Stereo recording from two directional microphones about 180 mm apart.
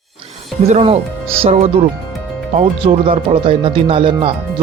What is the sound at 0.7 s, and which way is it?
Speech, 35° right (ahead or behind).